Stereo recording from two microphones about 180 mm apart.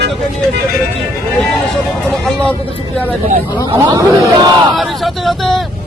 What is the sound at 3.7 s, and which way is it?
Speech, 20° right (ahead or behind).